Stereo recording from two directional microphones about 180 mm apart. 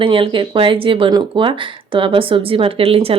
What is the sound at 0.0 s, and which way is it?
Speech, 30° right (ahead or behind).